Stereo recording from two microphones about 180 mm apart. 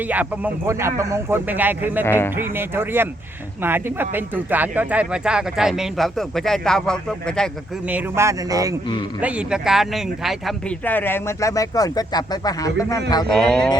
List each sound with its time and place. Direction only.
0.0 s a man's voice: 10° right (ahead or behind)
2.0 s speech: 10° left (ahead or behind)
2.3 s a man's voice: 10° right (ahead or behind); by 7.5 s 5° left (ahead or behind)
7.9 s a man's voice: 10° right (ahead or behind)
9.2 s speech: 5° right (ahead or behind)
10.8 s speech: 10° left (ahead or behind)
13.3 s speech: 5° left (ahead or behind)